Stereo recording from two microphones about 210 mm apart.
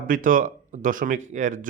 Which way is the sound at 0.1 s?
40° right (ahead or behind).